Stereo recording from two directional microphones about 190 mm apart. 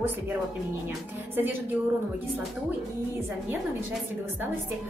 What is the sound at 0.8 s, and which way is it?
Speech, 10° right (ahead or behind).